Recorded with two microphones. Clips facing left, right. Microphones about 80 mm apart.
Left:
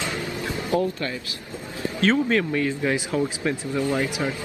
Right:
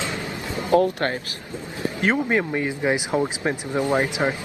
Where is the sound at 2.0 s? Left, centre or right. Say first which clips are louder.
Left 1 dB; centre.